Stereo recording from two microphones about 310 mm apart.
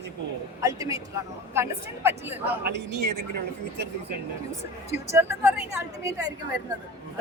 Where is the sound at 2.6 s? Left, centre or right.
Right.